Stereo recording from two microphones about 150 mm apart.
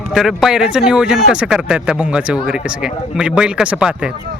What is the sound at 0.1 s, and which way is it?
Speech, centre (ahead or behind).